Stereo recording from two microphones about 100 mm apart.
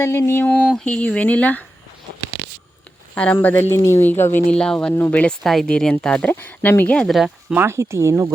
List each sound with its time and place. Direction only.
0.0 s speech: 25° left (ahead or behind)
3.2 s speech: 15° left (ahead or behind)
4.4 s speech: 10° left (ahead or behind)
5.4 s speech: 5° left (ahead or behind)
7.5 s speech: 25° right (ahead or behind)